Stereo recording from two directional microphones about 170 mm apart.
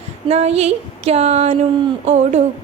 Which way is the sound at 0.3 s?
40° right (ahead or behind).